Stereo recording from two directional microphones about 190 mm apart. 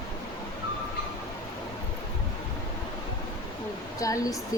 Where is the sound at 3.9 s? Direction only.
20° left (ahead or behind).